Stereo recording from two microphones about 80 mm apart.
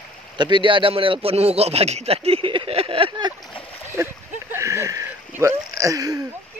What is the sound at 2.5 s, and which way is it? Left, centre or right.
Speech, right.